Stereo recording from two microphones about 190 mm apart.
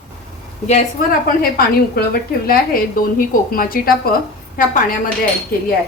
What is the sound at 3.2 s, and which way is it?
A woman's voice, 50° left (ahead or behind).